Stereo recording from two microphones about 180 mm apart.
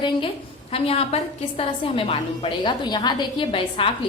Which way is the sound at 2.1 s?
30° left (ahead or behind).